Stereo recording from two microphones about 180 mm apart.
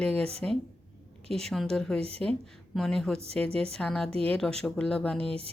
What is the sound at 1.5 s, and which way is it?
Speech, centre (ahead or behind).